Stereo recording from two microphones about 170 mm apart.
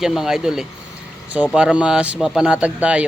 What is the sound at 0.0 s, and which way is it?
Speech, 5° right (ahead or behind).